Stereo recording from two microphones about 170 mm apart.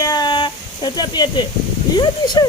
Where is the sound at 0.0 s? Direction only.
25° left (ahead or behind).